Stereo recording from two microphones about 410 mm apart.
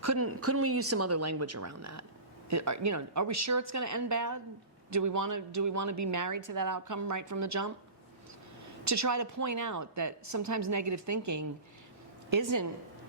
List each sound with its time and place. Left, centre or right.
0.0 s speech: right
8.8 s speech: right